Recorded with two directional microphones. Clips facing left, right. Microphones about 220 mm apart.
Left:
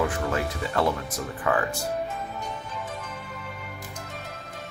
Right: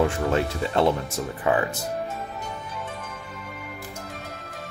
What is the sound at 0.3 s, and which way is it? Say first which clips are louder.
Speech: right 5 dB; 25° right (ahead or behind).